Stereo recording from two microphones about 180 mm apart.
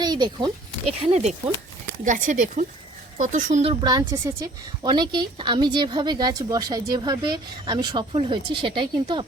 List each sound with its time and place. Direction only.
0.0 s a woman's voice: 25° right (ahead or behind)